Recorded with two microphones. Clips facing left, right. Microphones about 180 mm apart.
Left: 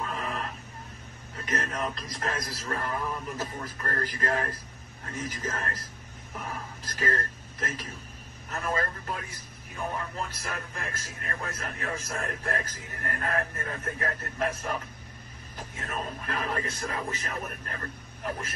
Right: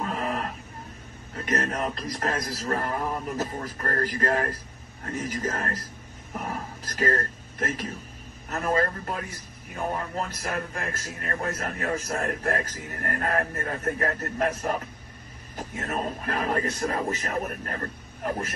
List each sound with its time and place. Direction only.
0.0 s vehicle: 40° right (ahead or behind)
1.5 s speech: 40° right (ahead or behind)
7.0 s speech: 40° right (ahead or behind)
15.5 s music: 45° right (ahead or behind)